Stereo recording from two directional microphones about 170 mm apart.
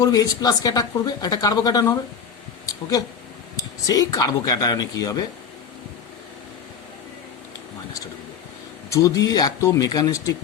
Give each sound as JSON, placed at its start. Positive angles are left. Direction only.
{"t": 0.0, "sound": "speech", "side_deg": 20}
{"t": 8.9, "sound": "speech", "side_deg": 20}